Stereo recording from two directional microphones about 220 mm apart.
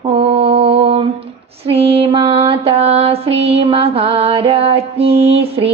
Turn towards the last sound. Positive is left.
turn(degrees=-25)  # may be behind; listen again after turning